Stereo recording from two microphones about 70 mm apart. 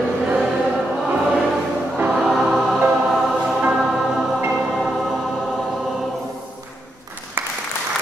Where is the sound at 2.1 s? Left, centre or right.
Centre.